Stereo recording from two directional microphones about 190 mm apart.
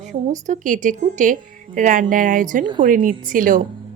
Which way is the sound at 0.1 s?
40° right (ahead or behind).